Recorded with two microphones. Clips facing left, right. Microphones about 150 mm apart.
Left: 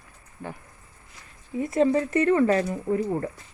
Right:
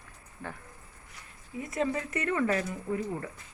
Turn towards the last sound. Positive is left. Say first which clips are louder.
# left 7 dB
turn(degrees=35)  # may be behind; listen again after turning